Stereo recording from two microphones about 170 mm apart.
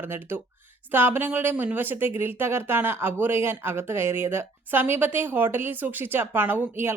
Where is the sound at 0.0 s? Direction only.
10° right (ahead or behind).